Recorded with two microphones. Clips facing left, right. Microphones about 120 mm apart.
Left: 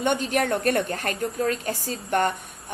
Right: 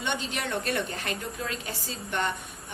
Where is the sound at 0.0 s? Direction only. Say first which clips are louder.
Left 9 dB; 50° left (ahead or behind).